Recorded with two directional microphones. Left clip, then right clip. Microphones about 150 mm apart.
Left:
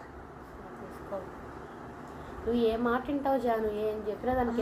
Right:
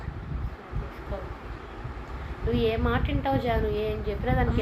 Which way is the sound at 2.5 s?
25° left (ahead or behind).